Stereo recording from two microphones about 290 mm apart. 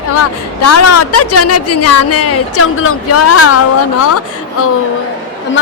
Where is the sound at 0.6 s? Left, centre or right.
Left.